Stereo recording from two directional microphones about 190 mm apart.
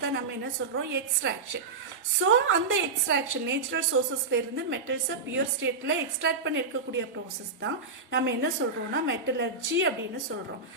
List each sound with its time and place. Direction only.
0.0 s a woman's voice: 65° right (ahead or behind)
8.1 s a woman's voice: 70° right (ahead or behind)